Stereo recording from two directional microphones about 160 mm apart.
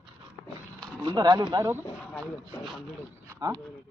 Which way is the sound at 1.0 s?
25° right (ahead or behind).